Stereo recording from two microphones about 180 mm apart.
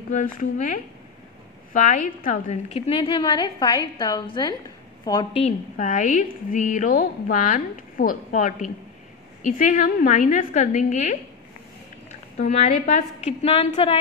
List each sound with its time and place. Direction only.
0.1 s a woman's voice: 45° left (ahead or behind)
2.4 s a woman's voice: 30° left (ahead or behind)
5.3 s a woman's voice: 40° left (ahead or behind)
12.4 s a woman's voice: 35° left (ahead or behind)